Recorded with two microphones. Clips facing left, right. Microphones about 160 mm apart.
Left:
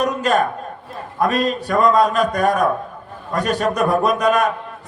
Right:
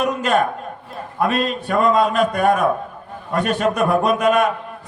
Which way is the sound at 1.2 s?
40° left (ahead or behind).